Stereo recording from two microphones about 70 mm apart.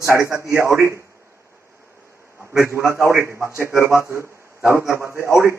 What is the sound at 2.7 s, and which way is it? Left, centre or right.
A man's voice, right.